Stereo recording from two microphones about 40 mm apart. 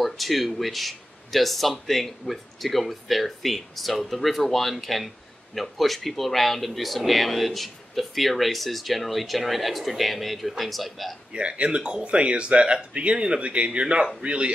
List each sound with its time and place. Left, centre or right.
0.0 s speech: centre
11.3 s speech: right